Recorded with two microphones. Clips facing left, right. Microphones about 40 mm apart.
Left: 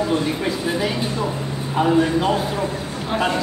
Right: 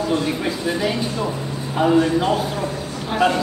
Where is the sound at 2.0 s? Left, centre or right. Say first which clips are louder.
Even; centre.